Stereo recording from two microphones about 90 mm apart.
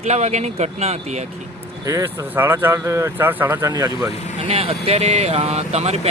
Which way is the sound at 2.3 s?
25° right (ahead or behind).